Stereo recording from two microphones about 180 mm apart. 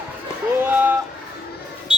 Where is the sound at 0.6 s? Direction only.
10° right (ahead or behind).